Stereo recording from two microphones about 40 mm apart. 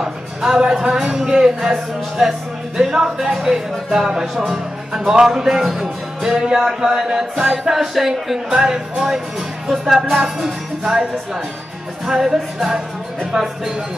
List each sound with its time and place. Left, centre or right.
0.0 s music: centre
4.5 s speech: centre
5.1 s music: centre
6.3 s music: centre
7.3 s music: centre
8.5 s music: centre
12.1 s music: centre